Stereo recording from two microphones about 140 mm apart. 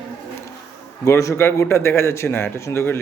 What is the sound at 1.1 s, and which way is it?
A man's voice, 20° left (ahead or behind).